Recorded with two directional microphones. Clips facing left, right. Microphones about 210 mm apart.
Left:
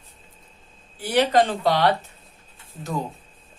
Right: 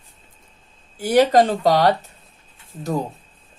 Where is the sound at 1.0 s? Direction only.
45° right (ahead or behind).